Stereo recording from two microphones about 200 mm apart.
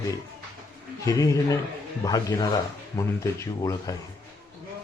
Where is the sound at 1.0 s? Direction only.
15° left (ahead or behind).